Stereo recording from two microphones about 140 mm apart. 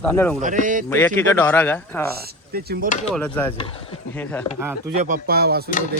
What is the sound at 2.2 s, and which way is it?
Speech, 90° right.